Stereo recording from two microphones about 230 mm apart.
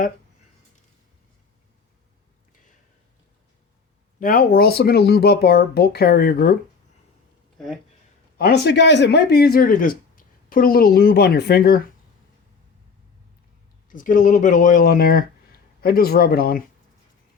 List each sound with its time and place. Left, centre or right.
4.2 s speech: left
8.4 s speech: left
13.9 s speech: left